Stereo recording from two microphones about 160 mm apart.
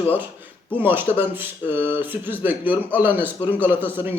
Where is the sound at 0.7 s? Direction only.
10° right (ahead or behind).